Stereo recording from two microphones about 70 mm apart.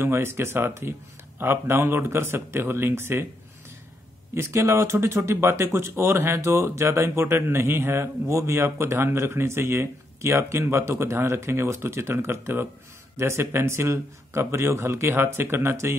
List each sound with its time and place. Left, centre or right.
0.0 s speech: right
4.3 s speech: right